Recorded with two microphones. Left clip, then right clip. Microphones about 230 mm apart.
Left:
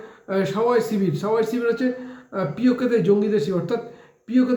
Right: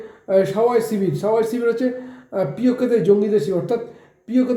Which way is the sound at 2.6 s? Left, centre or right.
Left.